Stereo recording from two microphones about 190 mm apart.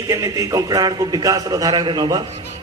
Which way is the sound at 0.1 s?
15° right (ahead or behind).